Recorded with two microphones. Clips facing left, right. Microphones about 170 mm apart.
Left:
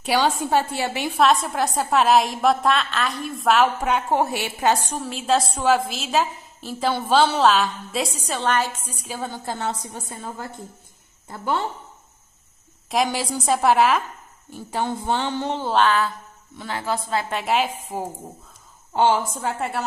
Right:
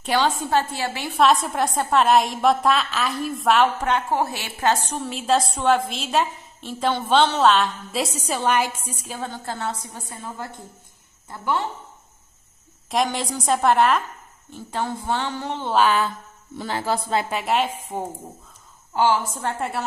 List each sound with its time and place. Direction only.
0.0 s a woman's voice: 10° left (ahead or behind)
1.1 s a woman's voice: centre (ahead or behind)
5.0 s a woman's voice: centre (ahead or behind)
8.3 s a woman's voice: 10° right (ahead or behind)
9.2 s a woman's voice: 15° left (ahead or behind)
12.9 s a woman's voice: 5° left (ahead or behind)
14.9 s a woman's voice: 20° left (ahead or behind)
15.6 s a woman's voice: centre (ahead or behind)
16.5 s speech: 35° right (ahead or behind)
17.3 s a woman's voice: centre (ahead or behind)
18.9 s a woman's voice: 25° left (ahead or behind)
19.4 s a woman's voice: centre (ahead or behind)